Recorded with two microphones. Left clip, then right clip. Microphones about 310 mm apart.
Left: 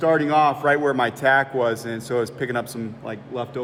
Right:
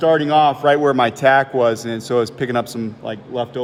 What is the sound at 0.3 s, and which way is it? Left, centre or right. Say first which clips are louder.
Speech: right 4 dB; right.